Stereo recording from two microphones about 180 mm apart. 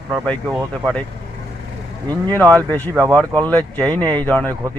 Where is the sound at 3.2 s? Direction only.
10° left (ahead or behind).